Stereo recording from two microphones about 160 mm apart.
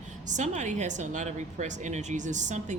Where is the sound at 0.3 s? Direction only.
50° right (ahead or behind).